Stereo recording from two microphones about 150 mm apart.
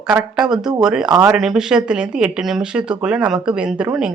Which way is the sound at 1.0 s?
25° right (ahead or behind).